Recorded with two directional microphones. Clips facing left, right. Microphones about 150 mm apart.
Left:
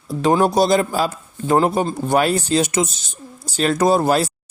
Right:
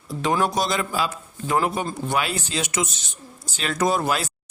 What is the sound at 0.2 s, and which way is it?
Speech, 35° left (ahead or behind).